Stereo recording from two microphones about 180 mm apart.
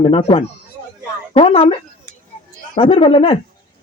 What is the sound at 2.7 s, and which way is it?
Speech, 30° left (ahead or behind).